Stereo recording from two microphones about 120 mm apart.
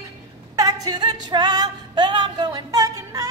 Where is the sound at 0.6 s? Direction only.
30° right (ahead or behind).